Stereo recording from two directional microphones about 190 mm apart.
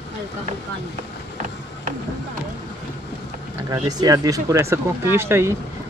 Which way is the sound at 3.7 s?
20° right (ahead or behind).